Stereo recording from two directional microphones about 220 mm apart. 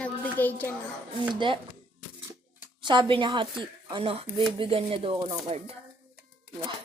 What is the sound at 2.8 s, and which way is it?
Speech, 20° right (ahead or behind).